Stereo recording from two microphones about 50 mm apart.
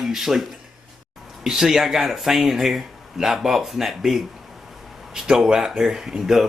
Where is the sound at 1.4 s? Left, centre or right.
Centre.